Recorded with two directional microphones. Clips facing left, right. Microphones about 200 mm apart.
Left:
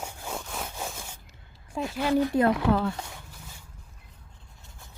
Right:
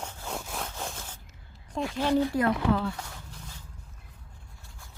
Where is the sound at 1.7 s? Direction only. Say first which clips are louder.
Even; 5° left (ahead or behind).